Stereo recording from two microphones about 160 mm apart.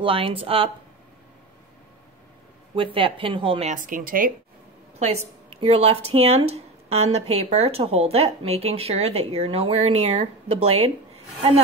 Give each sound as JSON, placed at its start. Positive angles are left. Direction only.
{"t": 0.0, "sound": "speech", "side_deg": -35}
{"t": 2.7, "sound": "speech", "side_deg": -35}
{"t": 3.7, "sound": "speech", "side_deg": -55}
{"t": 4.9, "sound": "speech", "side_deg": -40}